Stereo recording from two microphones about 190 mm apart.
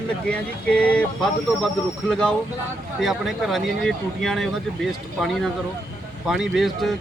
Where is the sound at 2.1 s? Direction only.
5° left (ahead or behind).